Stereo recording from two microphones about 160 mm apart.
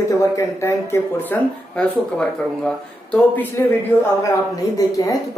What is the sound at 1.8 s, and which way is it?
Speech, 5° left (ahead or behind).